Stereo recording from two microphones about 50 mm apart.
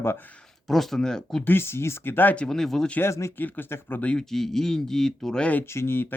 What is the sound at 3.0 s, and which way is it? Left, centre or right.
Speech, left.